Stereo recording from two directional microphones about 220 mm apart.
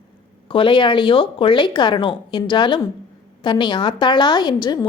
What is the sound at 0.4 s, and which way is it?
A woman's voice, 25° left (ahead or behind).